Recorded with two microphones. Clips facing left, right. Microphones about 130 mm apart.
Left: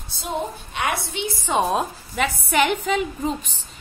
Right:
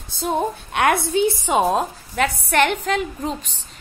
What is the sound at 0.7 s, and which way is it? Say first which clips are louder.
Speech: right 7 dB; 50° right (ahead or behind).